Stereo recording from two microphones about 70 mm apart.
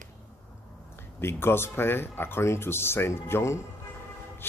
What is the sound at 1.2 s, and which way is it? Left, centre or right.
A man's voice, left.